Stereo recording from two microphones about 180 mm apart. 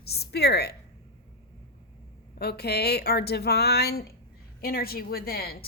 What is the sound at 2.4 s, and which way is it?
A woman's voice, 65° left (ahead or behind).